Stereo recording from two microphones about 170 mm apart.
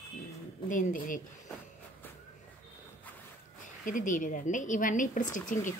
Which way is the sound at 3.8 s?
50° left (ahead or behind).